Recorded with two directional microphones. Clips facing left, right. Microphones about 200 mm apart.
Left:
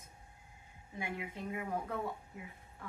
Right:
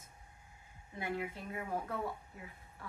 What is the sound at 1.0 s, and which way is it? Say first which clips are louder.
Speech: right 2 dB; 15° left (ahead or behind).